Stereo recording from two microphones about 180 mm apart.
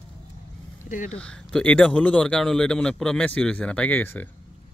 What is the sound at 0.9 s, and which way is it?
Speech, 45° left (ahead or behind).